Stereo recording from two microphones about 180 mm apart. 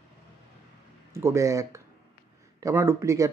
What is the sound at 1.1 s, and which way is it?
Speech, 15° right (ahead or behind).